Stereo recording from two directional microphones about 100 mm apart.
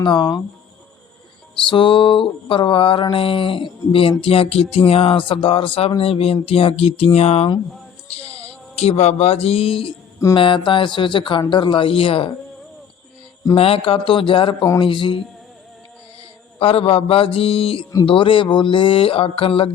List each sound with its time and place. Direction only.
0.0 s speech: 50° left (ahead or behind)
1.6 s mantra: 55° left (ahead or behind)
4.2 s speech: 75° left (ahead or behind)
4.9 s mantra: 70° left (ahead or behind)
6.0 s speech: 75° left (ahead or behind); by 7.5 s 90° left
8.7 s speech: 90° left; by 9.9 s 65° left (ahead or behind)
10.3 s mantra: 60° left (ahead or behind)
13.6 s mantra: 75° left (ahead or behind); by 15.2 s 55° left (ahead or behind)
16.6 s speech: 70° left (ahead or behind)
18.0 s mantra: 60° left (ahead or behind)